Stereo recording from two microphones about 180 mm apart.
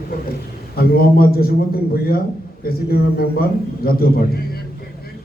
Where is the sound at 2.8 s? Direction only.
55° left (ahead or behind).